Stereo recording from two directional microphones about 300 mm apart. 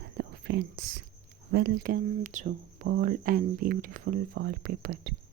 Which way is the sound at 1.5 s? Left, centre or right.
Right.